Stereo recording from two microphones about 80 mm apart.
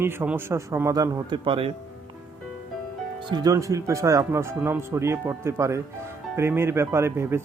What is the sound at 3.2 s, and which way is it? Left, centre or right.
Speech, right.